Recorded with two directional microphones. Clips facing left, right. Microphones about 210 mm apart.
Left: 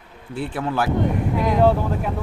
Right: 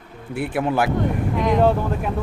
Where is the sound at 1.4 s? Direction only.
5° left (ahead or behind).